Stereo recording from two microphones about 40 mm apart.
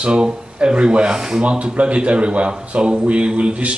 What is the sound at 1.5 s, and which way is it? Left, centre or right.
A man's voice, right.